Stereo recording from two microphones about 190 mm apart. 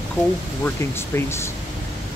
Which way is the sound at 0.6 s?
10° left (ahead or behind).